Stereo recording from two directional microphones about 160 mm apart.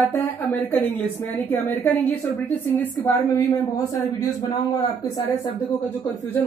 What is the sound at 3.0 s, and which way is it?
A woman's voice, 20° left (ahead or behind).